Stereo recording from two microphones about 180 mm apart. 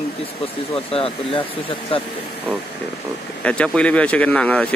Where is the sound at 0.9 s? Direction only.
30° left (ahead or behind).